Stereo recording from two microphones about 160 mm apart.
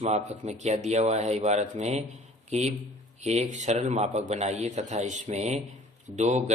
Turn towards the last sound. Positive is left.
turn(degrees=-45)  # may be behind; listen again after turning